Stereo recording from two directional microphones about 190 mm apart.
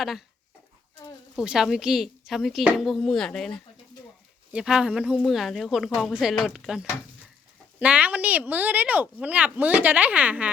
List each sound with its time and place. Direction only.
0.0 s a woman's voice: centre (ahead or behind)
1.4 s a woman's voice: centre (ahead or behind)